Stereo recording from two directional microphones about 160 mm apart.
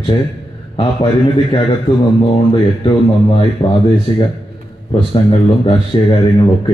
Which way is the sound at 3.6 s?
30° left (ahead or behind).